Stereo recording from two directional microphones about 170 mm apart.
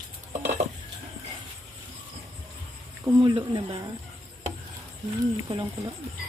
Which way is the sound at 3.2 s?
30° right (ahead or behind).